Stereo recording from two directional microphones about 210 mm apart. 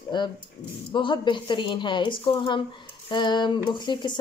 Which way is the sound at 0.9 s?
25° left (ahead or behind).